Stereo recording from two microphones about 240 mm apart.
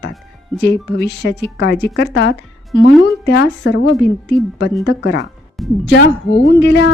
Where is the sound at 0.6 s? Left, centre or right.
Left.